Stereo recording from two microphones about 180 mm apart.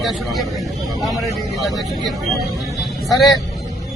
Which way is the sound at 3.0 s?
Centre (ahead or behind).